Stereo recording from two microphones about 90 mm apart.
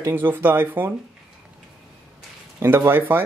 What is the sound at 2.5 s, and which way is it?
Speech, 25° right (ahead or behind).